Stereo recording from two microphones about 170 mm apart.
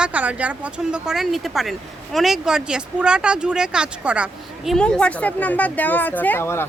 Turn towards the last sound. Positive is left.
turn(degrees=15)  # may be behind; listen again after turning